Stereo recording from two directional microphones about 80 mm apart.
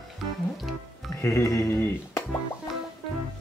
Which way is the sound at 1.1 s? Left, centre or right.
Left.